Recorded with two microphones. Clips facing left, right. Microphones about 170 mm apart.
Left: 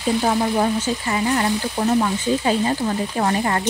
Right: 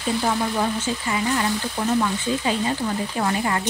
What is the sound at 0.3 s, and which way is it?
Speech, 40° left (ahead or behind).